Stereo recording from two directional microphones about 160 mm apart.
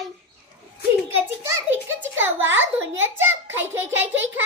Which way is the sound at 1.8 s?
15° right (ahead or behind).